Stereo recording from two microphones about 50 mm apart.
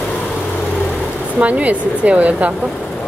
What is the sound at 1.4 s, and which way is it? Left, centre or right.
Speech, right.